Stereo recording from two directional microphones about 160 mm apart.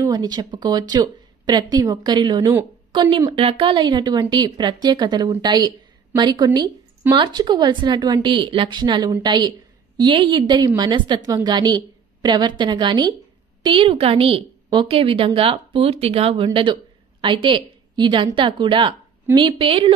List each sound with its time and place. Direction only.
0.0 s a woman's voice: 25° right (ahead or behind)